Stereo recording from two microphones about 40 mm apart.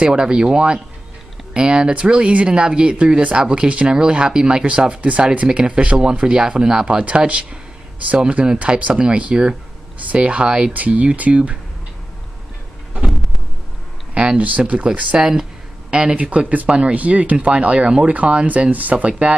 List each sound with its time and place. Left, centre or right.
0.0 s speech: right
4.6 s speech: right
5.9 s speech: right
7.1 s speech: right
14.1 s speech: right
14.7 s speech: right
15.1 s speech: centre
16.2 s speech: right
16.6 s speech: right
16.9 s speech: right